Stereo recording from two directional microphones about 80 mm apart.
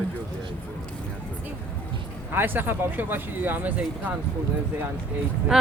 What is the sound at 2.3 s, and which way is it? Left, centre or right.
Speech, right.